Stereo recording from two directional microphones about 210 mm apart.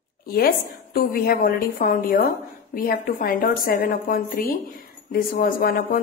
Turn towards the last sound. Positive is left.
turn(degrees=45)  # may be behind; listen again after turning